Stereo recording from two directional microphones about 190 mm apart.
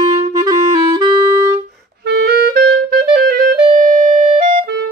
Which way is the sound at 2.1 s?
55° right (ahead or behind).